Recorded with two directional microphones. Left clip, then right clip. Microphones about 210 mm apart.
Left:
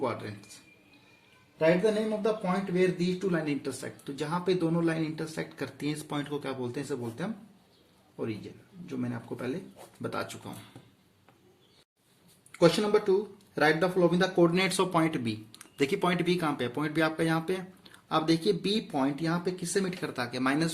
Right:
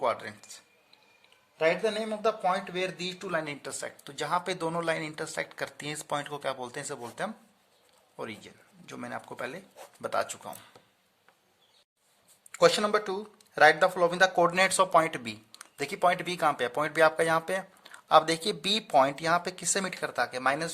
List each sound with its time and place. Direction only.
0.0 s speech: 45° right (ahead or behind)
1.5 s speech: 50° right (ahead or behind)
8.9 s speech: 50° right (ahead or behind)
12.5 s speech: 45° right (ahead or behind)